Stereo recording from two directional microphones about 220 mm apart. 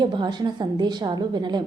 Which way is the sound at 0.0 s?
20° right (ahead or behind).